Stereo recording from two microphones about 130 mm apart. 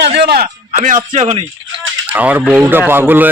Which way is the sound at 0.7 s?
85° right.